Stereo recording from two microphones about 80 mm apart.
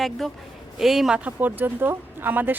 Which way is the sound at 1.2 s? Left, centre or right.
Right.